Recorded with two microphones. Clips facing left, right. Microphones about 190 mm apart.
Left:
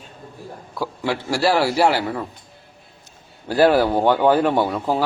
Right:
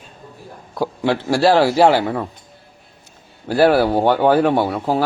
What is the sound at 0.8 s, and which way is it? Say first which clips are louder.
A man's voice: right 5 dB; 20° right (ahead or behind).